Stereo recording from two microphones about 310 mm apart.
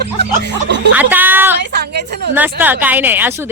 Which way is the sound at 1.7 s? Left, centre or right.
Right.